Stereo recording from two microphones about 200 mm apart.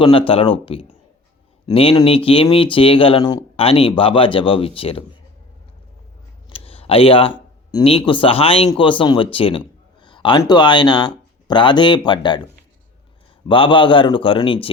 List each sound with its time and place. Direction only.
0.0 s speech: 25° left (ahead or behind)
6.5 s a sound: 30° left (ahead or behind)
7.7 s speech: 25° left (ahead or behind)
13.5 s speech: 25° left (ahead or behind)